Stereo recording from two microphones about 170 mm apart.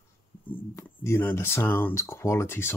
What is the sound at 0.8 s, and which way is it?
Speech, 15° left (ahead or behind).